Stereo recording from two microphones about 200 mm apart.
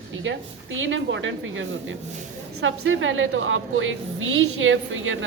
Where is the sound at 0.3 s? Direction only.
70° right (ahead or behind).